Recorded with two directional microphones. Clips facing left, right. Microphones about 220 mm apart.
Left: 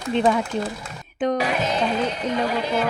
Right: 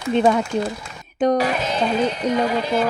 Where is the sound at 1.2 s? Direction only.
40° right (ahead or behind).